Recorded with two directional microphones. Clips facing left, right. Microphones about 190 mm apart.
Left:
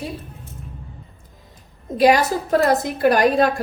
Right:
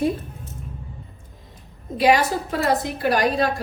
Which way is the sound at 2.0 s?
45° left (ahead or behind).